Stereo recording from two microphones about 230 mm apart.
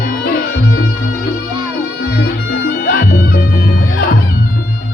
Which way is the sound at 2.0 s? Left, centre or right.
Left.